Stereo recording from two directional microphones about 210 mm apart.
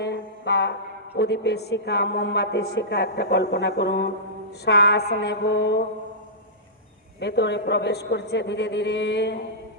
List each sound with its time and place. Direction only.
0.0 s speech: 55° left (ahead or behind)
7.2 s a woman's voice: 55° left (ahead or behind)